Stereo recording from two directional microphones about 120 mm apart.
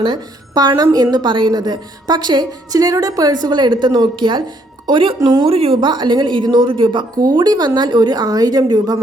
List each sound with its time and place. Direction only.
0.0 s a woman's voice: 35° right (ahead or behind)
5.5 s a woman's voice: 55° right (ahead or behind)
5.9 s a woman's voice: 40° right (ahead or behind)